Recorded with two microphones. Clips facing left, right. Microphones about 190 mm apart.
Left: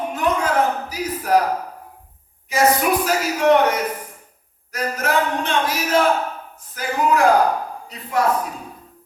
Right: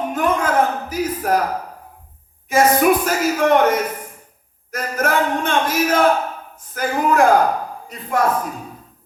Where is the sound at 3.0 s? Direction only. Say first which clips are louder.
Even; 50° right (ahead or behind).